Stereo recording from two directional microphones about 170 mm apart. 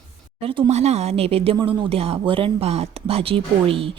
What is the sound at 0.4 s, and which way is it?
Speech, 35° right (ahead or behind).